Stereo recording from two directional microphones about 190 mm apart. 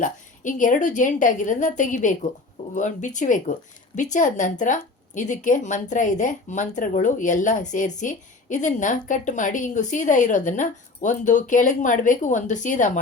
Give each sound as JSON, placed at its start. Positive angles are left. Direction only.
{"t": 0.0, "sound": "a woman's voice", "side_deg": 40}